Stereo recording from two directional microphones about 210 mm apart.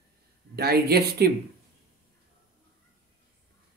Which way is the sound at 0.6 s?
50° right (ahead or behind).